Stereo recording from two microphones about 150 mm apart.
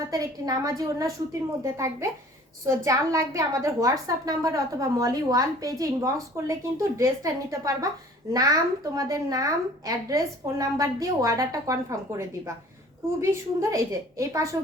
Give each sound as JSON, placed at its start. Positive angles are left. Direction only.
{"t": 0.1, "sound": "a woman's voice", "side_deg": -25}